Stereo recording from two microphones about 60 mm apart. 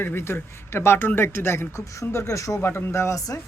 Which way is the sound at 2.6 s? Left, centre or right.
Left.